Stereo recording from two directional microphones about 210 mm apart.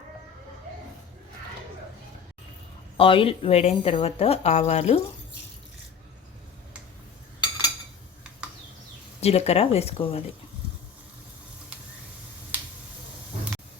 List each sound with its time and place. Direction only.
3.0 s speech: 25° left (ahead or behind)
9.2 s speech: 30° left (ahead or behind)
12.5 s finger snapping: 10° right (ahead or behind)